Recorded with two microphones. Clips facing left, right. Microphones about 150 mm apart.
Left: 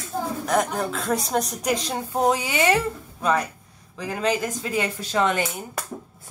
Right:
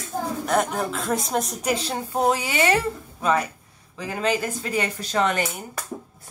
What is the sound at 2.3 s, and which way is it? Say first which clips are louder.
Speech: even; 10° left (ahead or behind).